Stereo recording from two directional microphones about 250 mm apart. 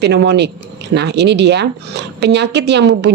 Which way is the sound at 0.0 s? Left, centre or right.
Right.